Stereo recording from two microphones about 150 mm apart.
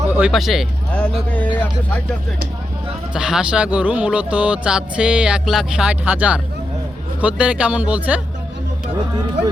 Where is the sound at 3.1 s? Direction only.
5° right (ahead or behind).